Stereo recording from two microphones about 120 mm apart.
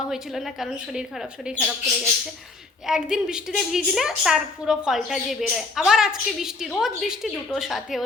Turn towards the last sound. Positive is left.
turn(degrees=0)  # may be behind; listen again after turning